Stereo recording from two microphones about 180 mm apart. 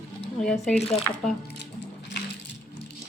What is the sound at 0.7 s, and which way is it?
Speech, 35° left (ahead or behind).